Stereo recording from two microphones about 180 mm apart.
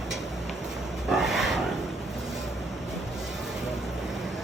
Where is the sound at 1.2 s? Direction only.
Centre (ahead or behind).